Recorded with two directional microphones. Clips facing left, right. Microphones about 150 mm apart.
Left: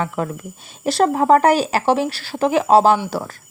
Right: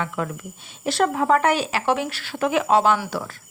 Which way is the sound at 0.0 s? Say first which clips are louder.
Left 4 dB; 35° left (ahead or behind).